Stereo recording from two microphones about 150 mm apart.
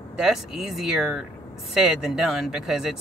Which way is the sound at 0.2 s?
Centre (ahead or behind).